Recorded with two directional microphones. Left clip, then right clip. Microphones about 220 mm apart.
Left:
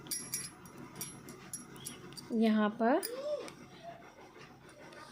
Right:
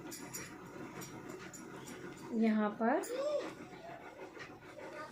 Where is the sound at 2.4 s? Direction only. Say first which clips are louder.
Left 3 dB; 50° left (ahead or behind).